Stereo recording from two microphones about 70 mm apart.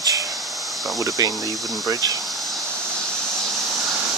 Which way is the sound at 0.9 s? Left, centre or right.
Right.